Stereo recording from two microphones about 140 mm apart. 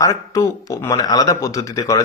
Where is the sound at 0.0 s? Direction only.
20° left (ahead or behind).